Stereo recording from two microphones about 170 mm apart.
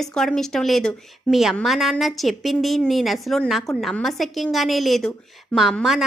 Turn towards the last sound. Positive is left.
turn(degrees=0)  # may be behind; listen again after turning